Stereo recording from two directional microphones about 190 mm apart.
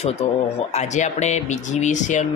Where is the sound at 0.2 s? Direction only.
35° left (ahead or behind).